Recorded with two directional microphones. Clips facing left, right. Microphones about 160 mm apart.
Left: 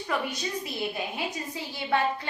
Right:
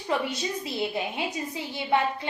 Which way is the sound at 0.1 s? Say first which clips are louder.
Right 3 dB; 25° right (ahead or behind).